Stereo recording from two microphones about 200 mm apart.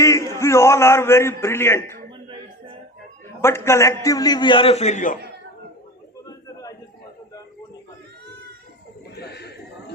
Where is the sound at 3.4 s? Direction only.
15° left (ahead or behind); by 5.2 s 40° left (ahead or behind).